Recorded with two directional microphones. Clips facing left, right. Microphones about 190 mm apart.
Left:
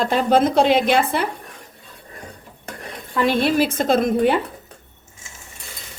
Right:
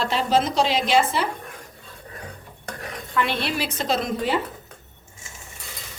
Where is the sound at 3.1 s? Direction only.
40° left (ahead or behind).